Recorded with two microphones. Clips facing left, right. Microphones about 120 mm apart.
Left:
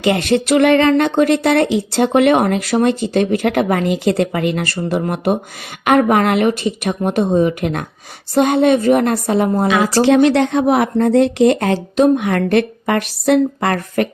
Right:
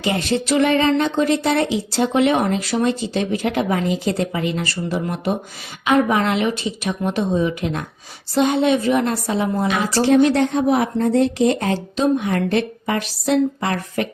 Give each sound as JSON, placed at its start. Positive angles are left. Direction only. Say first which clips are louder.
{"t": 0.0, "sound": "a woman's voice", "louder": "left 6 dB", "side_deg": 65}
{"t": 9.6, "sound": "speech", "louder": "left 4 dB", "side_deg": 90}